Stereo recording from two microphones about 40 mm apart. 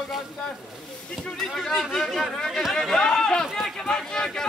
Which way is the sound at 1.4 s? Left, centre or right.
Centre.